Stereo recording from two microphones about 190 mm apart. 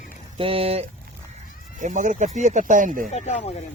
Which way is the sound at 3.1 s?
35° left (ahead or behind).